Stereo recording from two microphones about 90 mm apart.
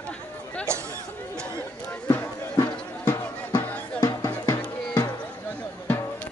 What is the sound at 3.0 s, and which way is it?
Music, 20° left (ahead or behind).